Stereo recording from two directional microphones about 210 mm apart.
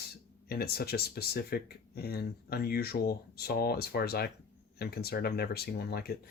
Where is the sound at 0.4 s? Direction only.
45° left (ahead or behind).